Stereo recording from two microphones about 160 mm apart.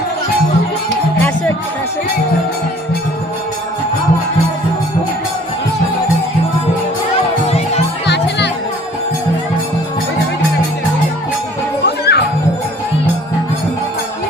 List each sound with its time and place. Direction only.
7.4 s music: 40° left (ahead or behind)
8.0 s music: 90° left
11.9 s music: 90° left